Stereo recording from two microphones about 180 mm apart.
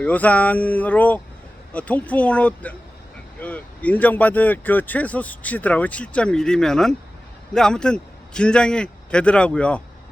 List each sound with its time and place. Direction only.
0.0 s a man's voice: 10° left (ahead or behind)